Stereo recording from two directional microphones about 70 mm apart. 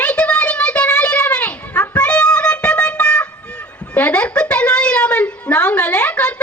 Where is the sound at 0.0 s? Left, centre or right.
Centre.